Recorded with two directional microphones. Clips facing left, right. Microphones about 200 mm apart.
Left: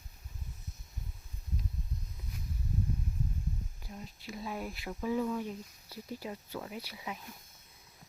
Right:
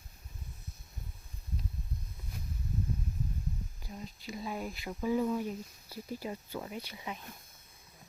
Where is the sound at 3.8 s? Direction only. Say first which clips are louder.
Right 2 dB; centre (ahead or behind).